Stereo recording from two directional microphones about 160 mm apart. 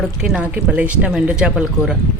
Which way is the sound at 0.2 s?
5° right (ahead or behind).